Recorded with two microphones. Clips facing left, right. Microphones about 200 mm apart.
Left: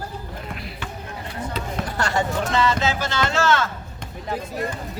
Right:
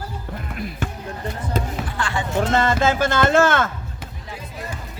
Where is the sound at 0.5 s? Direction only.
50° right (ahead or behind).